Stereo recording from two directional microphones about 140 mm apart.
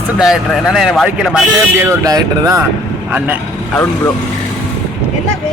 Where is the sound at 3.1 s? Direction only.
15° right (ahead or behind).